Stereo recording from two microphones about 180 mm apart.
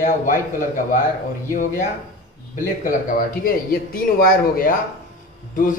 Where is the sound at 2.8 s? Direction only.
50° left (ahead or behind).